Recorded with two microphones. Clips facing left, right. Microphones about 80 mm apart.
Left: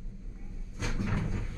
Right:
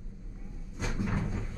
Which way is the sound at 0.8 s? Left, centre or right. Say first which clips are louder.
Right 1 dB; centre.